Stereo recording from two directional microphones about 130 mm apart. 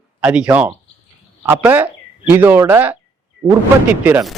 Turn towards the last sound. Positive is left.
turn(degrees=-15)  # may be behind; listen again after turning